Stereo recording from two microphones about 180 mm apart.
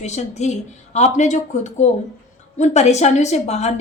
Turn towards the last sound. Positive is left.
turn(degrees=35)  # may be behind; listen again after turning